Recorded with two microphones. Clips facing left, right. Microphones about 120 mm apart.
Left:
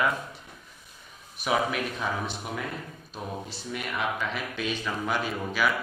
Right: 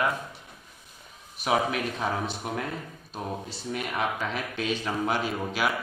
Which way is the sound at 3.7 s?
40° right (ahead or behind).